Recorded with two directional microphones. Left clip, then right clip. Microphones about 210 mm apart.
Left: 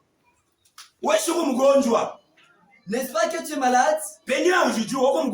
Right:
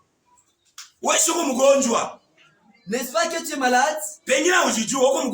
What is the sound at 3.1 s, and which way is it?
Rapping, 35° right (ahead or behind).